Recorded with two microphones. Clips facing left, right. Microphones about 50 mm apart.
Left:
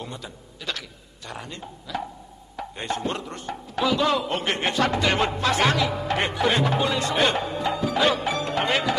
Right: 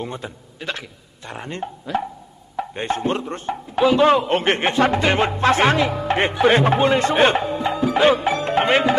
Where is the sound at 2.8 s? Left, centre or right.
Right.